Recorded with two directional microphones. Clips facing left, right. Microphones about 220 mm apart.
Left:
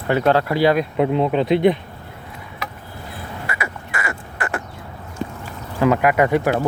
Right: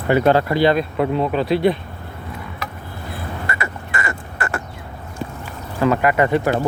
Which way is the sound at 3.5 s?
10° left (ahead or behind).